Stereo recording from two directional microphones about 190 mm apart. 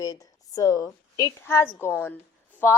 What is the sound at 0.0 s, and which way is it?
A woman's voice, 20° left (ahead or behind).